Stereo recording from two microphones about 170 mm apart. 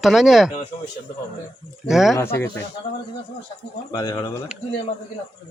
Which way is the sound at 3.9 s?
20° left (ahead or behind).